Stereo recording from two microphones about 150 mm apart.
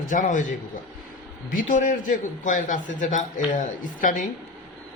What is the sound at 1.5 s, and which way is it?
A man's voice, 60° left (ahead or behind).